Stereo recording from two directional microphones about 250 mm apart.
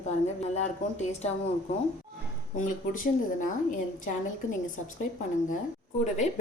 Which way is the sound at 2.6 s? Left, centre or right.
Left.